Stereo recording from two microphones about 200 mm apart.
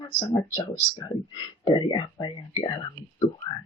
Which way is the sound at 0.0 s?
20° left (ahead or behind).